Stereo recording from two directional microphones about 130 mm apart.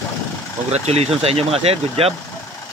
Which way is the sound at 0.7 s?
55° right (ahead or behind).